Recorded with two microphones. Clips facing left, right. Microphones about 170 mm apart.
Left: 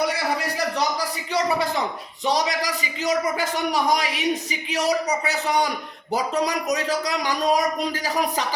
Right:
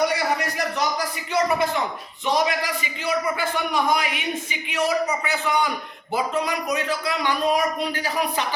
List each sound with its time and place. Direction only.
2.2 s a man's voice: 40° left (ahead or behind)